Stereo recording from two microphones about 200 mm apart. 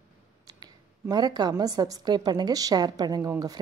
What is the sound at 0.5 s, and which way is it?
A woman's voice, 20° right (ahead or behind).